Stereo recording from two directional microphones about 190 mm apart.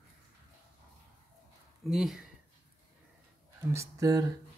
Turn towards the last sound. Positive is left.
turn(degrees=-15)  # may be behind; listen again after turning